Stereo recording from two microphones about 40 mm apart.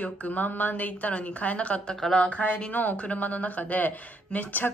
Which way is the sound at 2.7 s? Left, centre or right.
Left.